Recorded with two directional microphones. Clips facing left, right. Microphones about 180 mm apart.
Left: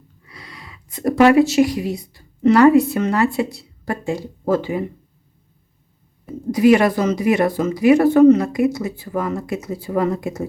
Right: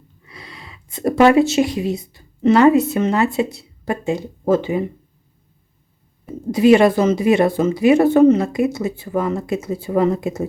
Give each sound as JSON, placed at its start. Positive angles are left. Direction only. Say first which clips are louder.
{"t": 0.3, "sound": "speech", "louder": "right 1 dB", "side_deg": -25}
{"t": 6.5, "sound": "speech", "louder": "right 2 dB", "side_deg": -25}